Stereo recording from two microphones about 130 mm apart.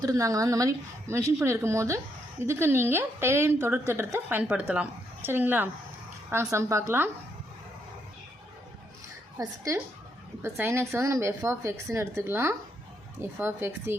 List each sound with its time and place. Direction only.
0.0 s a woman's voice: 25° right (ahead or behind)
9.4 s speech: 25° right (ahead or behind)